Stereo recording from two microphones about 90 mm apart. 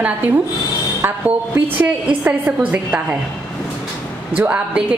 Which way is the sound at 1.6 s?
15° right (ahead or behind).